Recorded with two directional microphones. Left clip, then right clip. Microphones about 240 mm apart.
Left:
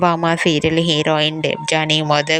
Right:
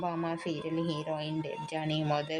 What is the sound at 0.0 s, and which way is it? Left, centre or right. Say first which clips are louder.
Speech: left 18 dB; left.